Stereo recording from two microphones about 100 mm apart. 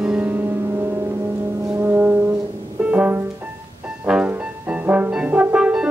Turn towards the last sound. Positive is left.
turn(degrees=-10)  # may be behind; listen again after turning